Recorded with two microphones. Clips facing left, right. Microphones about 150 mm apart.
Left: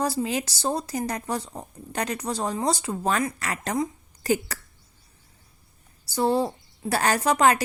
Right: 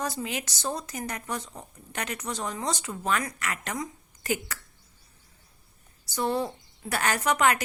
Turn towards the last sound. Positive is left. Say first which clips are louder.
# left 4 dB
turn(degrees=35)  # may be behind; listen again after turning